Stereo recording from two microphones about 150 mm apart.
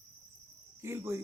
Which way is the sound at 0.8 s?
15° right (ahead or behind).